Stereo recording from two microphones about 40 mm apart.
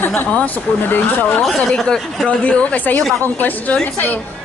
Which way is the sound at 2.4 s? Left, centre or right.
Left.